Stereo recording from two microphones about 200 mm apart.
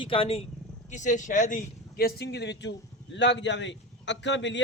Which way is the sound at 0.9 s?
40° left (ahead or behind).